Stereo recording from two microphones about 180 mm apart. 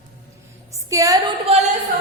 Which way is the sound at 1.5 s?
30° right (ahead or behind).